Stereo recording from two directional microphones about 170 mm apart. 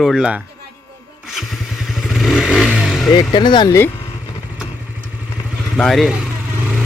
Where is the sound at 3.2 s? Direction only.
25° left (ahead or behind).